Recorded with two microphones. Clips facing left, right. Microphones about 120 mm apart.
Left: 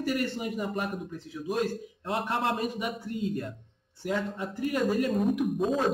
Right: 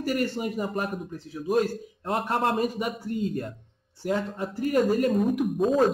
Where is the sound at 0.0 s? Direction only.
40° right (ahead or behind).